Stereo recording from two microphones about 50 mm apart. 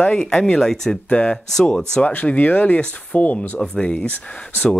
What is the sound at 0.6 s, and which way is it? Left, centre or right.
Speech, centre.